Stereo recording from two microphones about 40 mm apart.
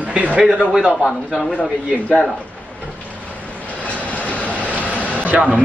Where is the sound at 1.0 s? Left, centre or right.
Centre.